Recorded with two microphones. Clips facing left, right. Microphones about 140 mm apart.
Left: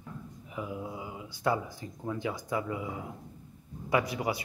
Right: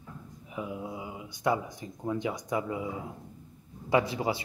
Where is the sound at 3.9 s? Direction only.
25° right (ahead or behind).